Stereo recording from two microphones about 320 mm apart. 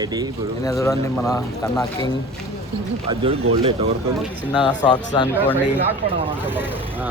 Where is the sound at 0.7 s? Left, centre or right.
Centre.